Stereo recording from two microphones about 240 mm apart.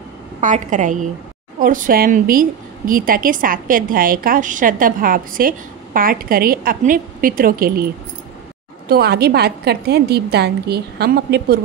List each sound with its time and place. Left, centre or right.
0.4 s a woman's voice: right